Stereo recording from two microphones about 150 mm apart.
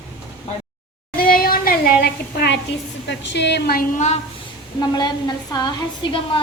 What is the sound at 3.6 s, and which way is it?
Speech, 90° left.